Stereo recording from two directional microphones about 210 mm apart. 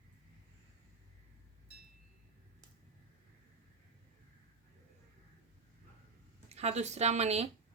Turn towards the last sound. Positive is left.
turn(degrees=-30)  # may be behind; listen again after turning